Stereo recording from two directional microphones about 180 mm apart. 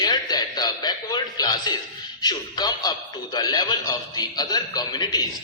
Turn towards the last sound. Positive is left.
turn(degrees=20)  # may be behind; listen again after turning